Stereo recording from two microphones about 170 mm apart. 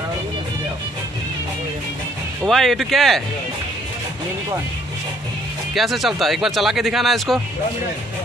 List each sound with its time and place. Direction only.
2.4 s speech: centre (ahead or behind)
5.8 s speech: centre (ahead or behind)